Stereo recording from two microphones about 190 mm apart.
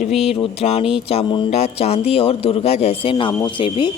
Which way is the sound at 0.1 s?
Centre (ahead or behind).